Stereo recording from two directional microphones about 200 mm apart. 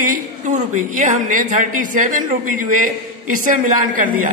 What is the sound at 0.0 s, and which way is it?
A woman's voice, 40° right (ahead or behind).